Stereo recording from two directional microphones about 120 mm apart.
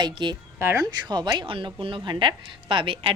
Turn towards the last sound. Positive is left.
turn(degrees=-50)  # may be behind; listen again after turning